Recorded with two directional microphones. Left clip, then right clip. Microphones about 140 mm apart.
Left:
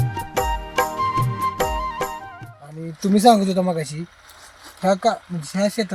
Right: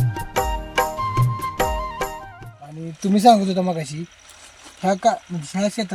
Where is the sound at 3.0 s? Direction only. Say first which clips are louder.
Right 1 dB; 25° left (ahead or behind).